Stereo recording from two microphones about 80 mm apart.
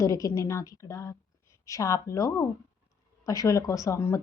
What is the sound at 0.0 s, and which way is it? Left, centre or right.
A woman's voice, left.